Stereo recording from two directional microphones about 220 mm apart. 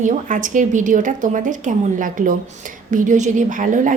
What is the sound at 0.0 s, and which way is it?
A woman's voice, 35° right (ahead or behind).